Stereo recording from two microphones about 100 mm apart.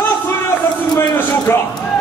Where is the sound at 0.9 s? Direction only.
25° left (ahead or behind).